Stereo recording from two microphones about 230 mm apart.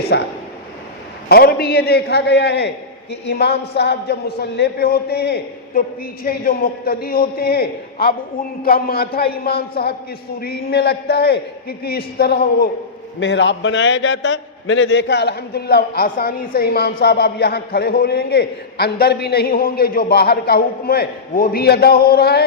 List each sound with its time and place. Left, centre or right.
0.1 s a man's voice: left
1.3 s a man's voice: left